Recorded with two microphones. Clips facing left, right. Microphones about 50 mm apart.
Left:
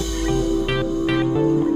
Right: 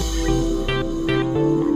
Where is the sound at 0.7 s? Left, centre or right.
Centre.